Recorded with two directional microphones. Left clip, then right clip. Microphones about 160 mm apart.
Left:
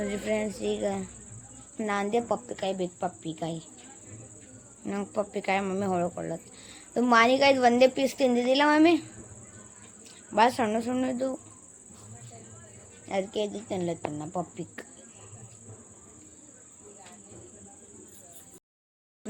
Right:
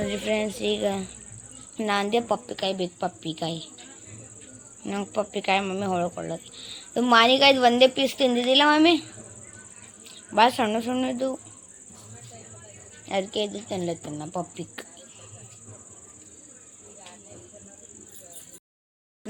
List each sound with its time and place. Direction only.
0.1 s a woman's voice: 10° right (ahead or behind)
4.9 s speech: 5° right (ahead or behind)
10.3 s speech: 5° right (ahead or behind)
13.1 s a woman's voice: 10° right (ahead or behind)